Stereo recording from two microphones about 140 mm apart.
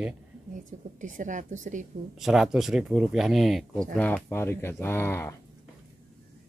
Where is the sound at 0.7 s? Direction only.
65° right (ahead or behind).